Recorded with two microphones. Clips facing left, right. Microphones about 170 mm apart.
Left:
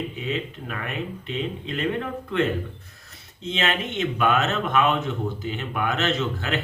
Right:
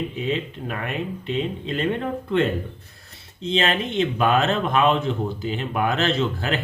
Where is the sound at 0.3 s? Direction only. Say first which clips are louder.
Right 3 dB; 35° right (ahead or behind).